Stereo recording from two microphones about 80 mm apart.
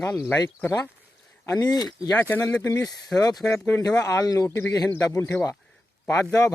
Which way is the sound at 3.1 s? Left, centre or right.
Left.